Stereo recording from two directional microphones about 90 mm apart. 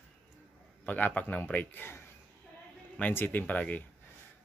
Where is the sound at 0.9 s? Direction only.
15° left (ahead or behind).